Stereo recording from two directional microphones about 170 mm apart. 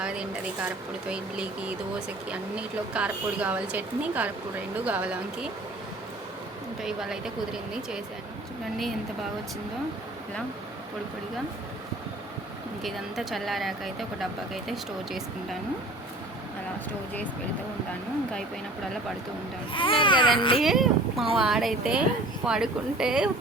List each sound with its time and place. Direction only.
0.0 s speech: 5° right (ahead or behind)
6.8 s speech: 5° right (ahead or behind)
12.8 s speech: centre (ahead or behind)
19.7 s speech: 30° left (ahead or behind)
20.6 s speech: centre (ahead or behind)